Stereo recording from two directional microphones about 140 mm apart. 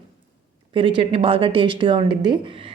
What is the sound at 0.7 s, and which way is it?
A woman's voice, 40° right (ahead or behind).